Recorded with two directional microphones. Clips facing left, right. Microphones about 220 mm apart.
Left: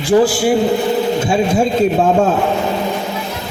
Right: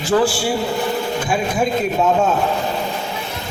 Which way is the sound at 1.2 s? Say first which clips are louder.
Left 5 dB; 25° left (ahead or behind).